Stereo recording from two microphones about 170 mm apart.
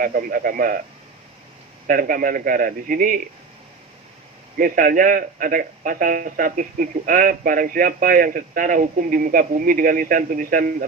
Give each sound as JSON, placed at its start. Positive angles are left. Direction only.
{"t": 0.0, "sound": "speech", "side_deg": -55}
{"t": 1.9, "sound": "a man's voice", "side_deg": -55}
{"t": 4.5, "sound": "a man's voice", "side_deg": -55}